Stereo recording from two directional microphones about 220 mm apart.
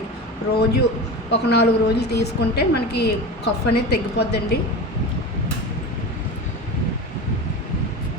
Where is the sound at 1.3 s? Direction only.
50° left (ahead or behind).